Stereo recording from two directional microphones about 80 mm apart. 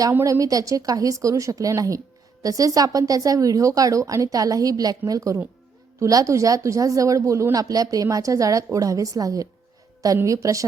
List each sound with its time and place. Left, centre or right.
0.3 s speech: right